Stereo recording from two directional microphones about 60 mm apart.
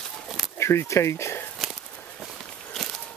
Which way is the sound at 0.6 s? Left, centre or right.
Left.